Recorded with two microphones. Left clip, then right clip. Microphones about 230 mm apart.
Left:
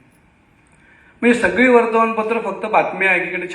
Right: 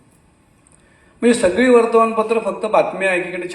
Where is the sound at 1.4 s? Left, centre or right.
Right.